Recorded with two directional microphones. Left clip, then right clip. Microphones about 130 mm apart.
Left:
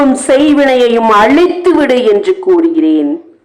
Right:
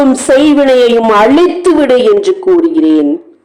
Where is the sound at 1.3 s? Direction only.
25° right (ahead or behind).